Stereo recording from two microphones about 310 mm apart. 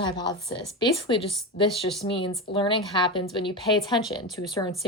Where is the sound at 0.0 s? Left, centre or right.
Centre.